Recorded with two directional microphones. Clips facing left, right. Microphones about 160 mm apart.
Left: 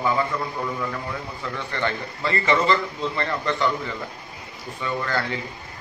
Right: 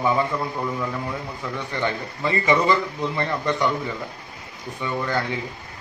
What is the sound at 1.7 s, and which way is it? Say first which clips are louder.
A man's voice: right 1 dB; 15° right (ahead or behind).